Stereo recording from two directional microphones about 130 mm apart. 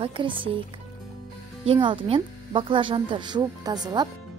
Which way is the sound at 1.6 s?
40° right (ahead or behind).